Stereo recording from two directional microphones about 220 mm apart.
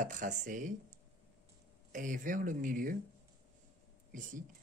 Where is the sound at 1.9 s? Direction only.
35° right (ahead or behind).